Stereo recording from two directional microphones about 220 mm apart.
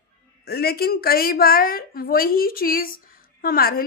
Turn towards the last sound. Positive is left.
turn(degrees=40)  # may be behind; listen again after turning